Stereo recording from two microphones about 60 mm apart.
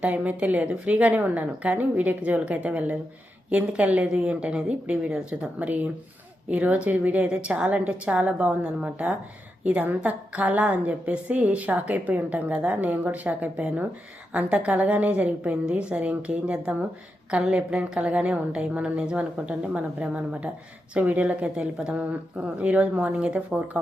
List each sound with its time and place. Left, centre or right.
0.0 s a woman's voice: right